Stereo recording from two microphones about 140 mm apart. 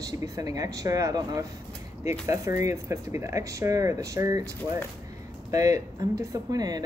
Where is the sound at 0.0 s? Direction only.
25° right (ahead or behind).